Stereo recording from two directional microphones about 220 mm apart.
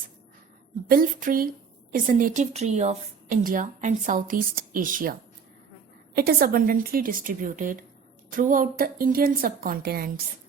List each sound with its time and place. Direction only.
0.9 s a woman's voice: 40° right (ahead or behind)
6.1 s a woman's voice: 40° right (ahead or behind)